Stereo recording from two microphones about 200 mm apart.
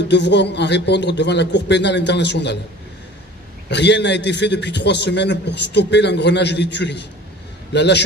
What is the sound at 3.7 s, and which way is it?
A man's voice, 60° left (ahead or behind).